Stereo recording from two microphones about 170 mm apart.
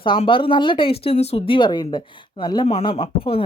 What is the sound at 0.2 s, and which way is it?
Speech, 30° left (ahead or behind).